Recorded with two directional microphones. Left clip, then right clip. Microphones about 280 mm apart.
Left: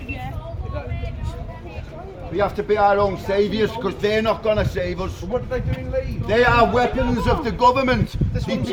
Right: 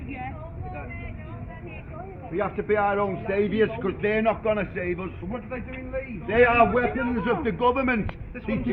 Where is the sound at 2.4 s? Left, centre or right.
Left.